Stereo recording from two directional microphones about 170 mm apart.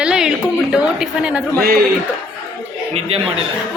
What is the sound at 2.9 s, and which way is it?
Speech, 35° right (ahead or behind).